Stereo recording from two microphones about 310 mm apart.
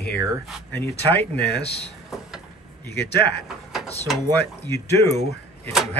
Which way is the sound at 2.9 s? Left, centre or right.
Left.